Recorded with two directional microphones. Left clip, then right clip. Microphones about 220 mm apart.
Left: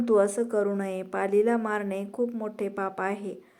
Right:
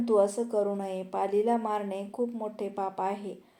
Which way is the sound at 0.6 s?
20° left (ahead or behind).